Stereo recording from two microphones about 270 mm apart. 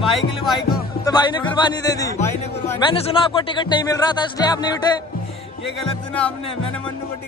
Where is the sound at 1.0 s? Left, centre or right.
Centre.